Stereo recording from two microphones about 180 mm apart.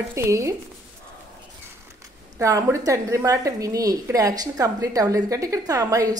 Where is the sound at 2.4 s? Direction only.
15° right (ahead or behind).